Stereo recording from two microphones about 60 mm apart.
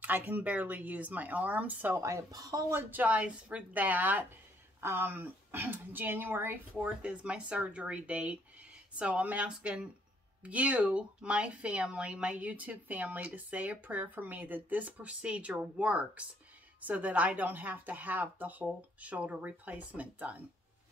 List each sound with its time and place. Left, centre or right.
0.0 s speech: right
2.0 s speech: right
2.3 s speech: right
2.7 s speech: right